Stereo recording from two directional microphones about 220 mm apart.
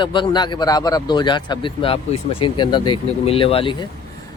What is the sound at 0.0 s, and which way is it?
Speech, 20° left (ahead or behind).